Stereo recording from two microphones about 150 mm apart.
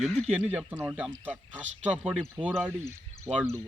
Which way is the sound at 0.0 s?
5° left (ahead or behind).